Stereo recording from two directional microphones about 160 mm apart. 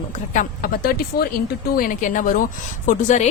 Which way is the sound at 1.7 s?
60° left (ahead or behind).